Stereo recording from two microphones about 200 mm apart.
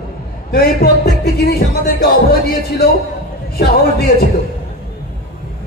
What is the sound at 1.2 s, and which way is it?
Music, 55° left (ahead or behind).